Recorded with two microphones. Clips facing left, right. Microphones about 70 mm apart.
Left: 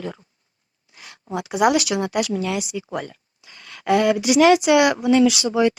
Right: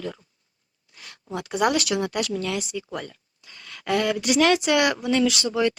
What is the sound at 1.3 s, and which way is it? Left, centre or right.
Speech, centre.